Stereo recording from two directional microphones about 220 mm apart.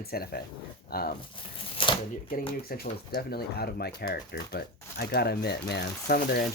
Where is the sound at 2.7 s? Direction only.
45° left (ahead or behind).